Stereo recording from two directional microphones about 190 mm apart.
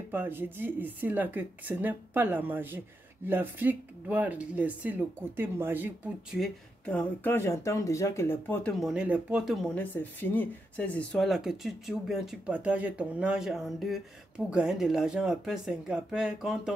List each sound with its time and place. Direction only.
0.1 s speech: 10° right (ahead or behind)
6.4 s speech: 10° left (ahead or behind)
8.7 s speech: 5° right (ahead or behind)